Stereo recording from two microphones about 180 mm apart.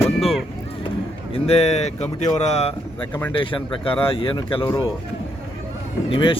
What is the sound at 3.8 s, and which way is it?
Speech, 30° left (ahead or behind).